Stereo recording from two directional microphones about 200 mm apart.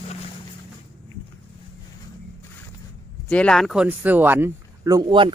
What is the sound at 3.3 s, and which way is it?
Speech, 5° left (ahead or behind).